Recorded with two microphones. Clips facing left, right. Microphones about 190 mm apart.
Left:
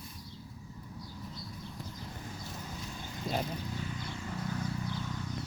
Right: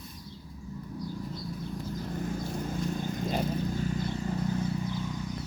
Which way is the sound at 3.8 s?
45° right (ahead or behind).